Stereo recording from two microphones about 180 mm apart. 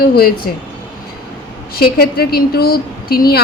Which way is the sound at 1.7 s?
55° left (ahead or behind).